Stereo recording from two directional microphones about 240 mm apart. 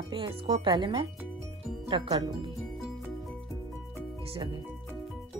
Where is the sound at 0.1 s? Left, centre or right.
Right.